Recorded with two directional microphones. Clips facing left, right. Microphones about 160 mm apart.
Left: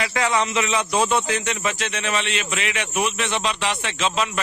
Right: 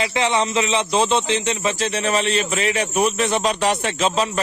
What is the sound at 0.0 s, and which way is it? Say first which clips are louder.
Speech: right 2 dB; 25° right (ahead or behind).